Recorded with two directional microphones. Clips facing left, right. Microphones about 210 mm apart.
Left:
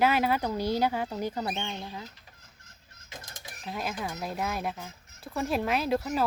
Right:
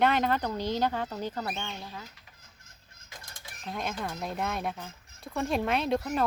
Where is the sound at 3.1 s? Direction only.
20° left (ahead or behind).